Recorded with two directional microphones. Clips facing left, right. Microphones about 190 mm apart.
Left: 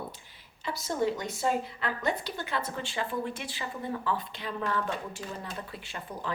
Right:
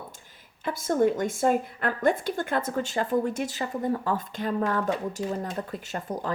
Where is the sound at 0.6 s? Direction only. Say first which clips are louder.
Right 6 dB; 50° right (ahead or behind).